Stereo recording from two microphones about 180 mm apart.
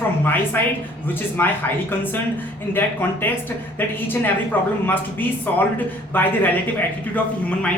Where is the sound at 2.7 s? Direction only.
10° left (ahead or behind).